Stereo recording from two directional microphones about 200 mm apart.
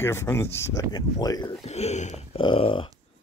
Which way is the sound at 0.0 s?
10° left (ahead or behind).